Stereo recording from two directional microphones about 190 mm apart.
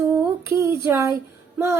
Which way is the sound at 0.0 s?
15° right (ahead or behind).